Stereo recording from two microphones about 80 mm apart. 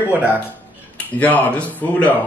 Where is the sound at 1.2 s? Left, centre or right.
Centre.